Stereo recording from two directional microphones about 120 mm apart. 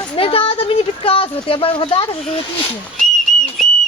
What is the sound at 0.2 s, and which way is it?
Speech, 50° left (ahead or behind).